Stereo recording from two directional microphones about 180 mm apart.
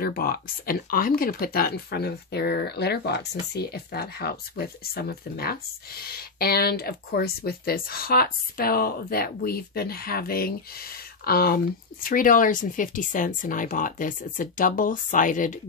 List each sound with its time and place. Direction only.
0.0 s speech: 55° left (ahead or behind)